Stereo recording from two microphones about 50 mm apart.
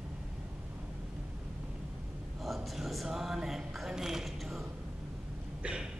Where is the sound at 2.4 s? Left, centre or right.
Centre.